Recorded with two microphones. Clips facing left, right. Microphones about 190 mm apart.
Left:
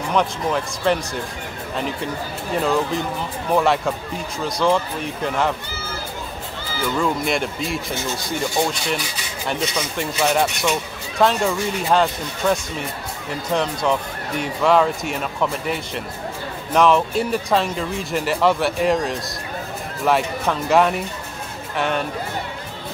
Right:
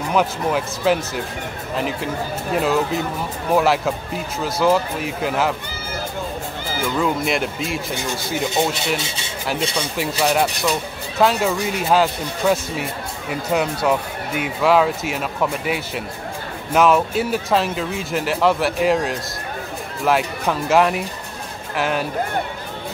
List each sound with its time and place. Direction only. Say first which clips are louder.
0.1 s speech: right 1 dB; 5° right (ahead or behind)
2.5 s speech: right 1 dB; 5° right (ahead or behind)
7.0 s speech: right 1 dB; centre (ahead or behind)
8.9 s speech: right 1 dB; 25° right (ahead or behind)
10.2 s speech: even; centre (ahead or behind)